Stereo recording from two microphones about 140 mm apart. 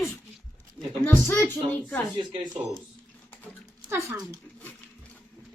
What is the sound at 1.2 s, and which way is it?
Speech, 20° left (ahead or behind).